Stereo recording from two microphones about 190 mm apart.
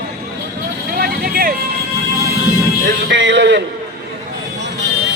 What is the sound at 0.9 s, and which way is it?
Vehicle, 50° right (ahead or behind).